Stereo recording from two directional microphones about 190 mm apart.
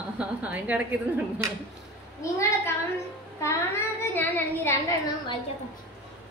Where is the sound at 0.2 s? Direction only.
5° right (ahead or behind).